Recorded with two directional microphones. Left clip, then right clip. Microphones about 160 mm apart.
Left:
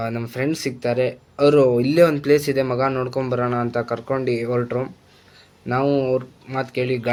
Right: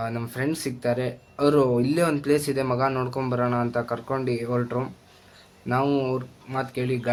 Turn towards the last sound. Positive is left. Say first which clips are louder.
# left 4 dB
turn(degrees=20)  # may be behind; listen again after turning